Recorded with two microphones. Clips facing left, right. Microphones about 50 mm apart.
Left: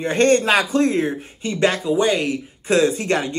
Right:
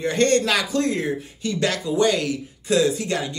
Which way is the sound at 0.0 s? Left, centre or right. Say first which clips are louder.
Left 3 dB; left.